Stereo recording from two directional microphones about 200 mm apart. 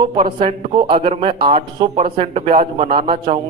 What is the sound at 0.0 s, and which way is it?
Speech, 25° right (ahead or behind).